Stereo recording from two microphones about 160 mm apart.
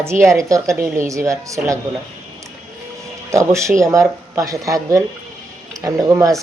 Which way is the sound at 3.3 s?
20° right (ahead or behind).